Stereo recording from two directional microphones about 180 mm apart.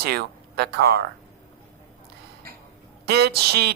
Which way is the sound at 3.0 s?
60° right (ahead or behind).